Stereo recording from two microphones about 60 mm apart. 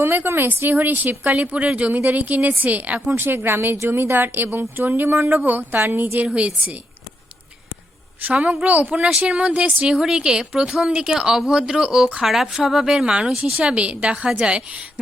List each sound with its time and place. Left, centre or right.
0.0 s a woman's voice: right
6.2 s a woman's voice: centre
8.2 s a woman's voice: right